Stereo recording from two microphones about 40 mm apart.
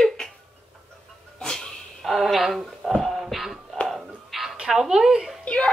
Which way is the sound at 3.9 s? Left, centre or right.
Centre.